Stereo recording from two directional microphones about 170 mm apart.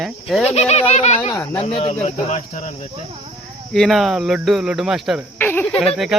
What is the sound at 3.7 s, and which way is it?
Speech, centre (ahead or behind).